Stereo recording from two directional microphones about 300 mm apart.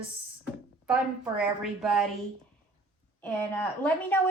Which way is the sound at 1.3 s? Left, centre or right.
Centre.